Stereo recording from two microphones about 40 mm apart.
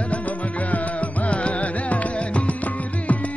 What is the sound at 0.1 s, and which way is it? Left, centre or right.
Music, left.